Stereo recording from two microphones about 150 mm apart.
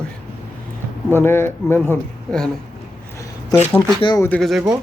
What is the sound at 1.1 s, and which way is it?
Speech, 15° left (ahead or behind).